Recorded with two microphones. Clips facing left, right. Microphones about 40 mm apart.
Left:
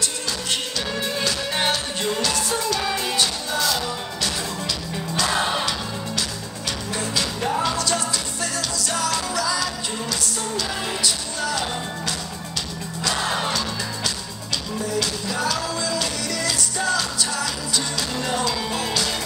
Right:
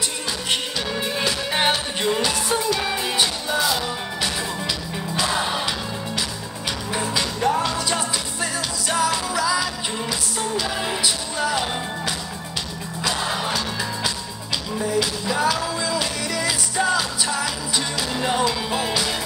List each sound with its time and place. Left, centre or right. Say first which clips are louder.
0.5 s music: right 3 dB; centre
6.9 s music: right 2 dB; centre
7.3 s music: right 3 dB; centre
7.7 s music: even; centre
13.1 s music: left 2 dB; centre
14.8 s music: right 3 dB; centre